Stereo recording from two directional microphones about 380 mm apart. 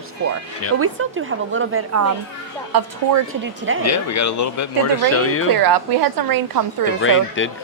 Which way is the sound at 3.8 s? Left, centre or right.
Left.